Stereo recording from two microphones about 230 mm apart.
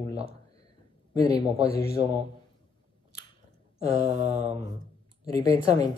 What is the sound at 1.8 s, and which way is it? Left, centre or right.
Speech, centre.